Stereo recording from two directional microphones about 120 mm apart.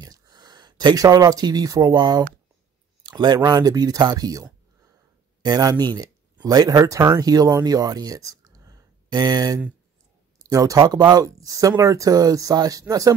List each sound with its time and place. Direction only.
0.0 s speech: 30° right (ahead or behind)
3.0 s a sound: 35° right (ahead or behind)
3.4 s speech: 35° right (ahead or behind)